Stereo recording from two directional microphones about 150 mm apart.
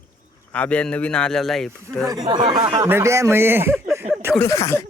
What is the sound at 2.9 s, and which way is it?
Speech, 15° right (ahead or behind).